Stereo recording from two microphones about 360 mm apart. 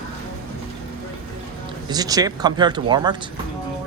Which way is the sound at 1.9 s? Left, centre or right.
Centre.